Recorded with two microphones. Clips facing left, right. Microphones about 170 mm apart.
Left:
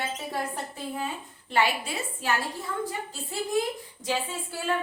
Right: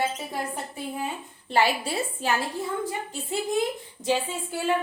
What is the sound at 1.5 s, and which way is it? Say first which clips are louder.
Speech: right 3 dB; 35° right (ahead or behind).